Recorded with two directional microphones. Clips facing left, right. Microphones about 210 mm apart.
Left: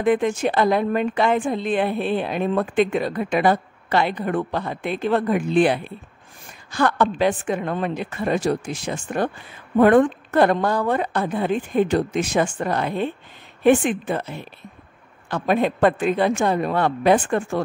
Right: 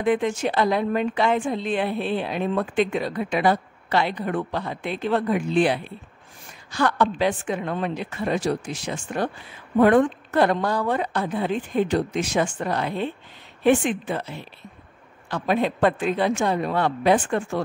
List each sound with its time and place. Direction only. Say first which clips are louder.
0.0 s a woman's voice: left 3 dB; 50° left (ahead or behind)